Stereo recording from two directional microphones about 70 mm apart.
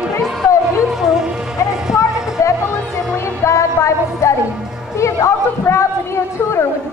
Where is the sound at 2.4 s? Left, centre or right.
Left.